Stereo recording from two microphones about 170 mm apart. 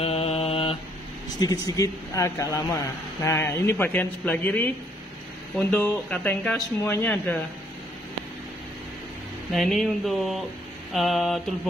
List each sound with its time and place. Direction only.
0.0 s mantra: 35° left (ahead or behind)
1.4 s speech: 20° left (ahead or behind)
9.5 s speech: centre (ahead or behind)